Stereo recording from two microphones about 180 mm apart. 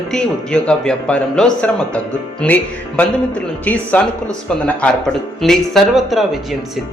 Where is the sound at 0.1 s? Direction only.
5° left (ahead or behind).